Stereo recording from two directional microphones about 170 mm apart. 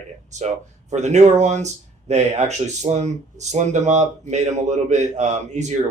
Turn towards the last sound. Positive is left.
turn(degrees=-45)  # may be behind; listen again after turning